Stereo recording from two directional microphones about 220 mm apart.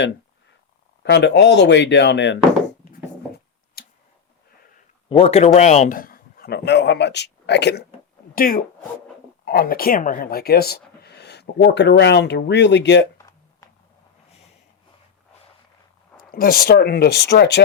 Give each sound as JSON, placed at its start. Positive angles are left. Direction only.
{"t": 1.0, "sound": "speech", "side_deg": 50}
{"t": 3.8, "sound": "tick-tock", "side_deg": 45}
{"t": 5.0, "sound": "a man's voice", "side_deg": 25}
{"t": 16.1, "sound": "speech", "side_deg": 40}